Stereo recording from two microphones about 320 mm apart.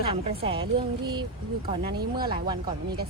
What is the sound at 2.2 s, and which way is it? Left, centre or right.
Speech, centre.